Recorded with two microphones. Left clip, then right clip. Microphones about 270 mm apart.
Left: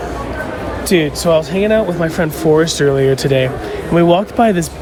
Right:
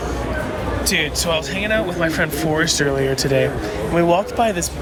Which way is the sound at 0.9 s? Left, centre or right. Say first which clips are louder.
Left 7 dB; centre.